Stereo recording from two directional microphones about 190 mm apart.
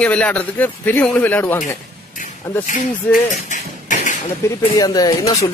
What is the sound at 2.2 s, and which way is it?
Speech, 40° left (ahead or behind).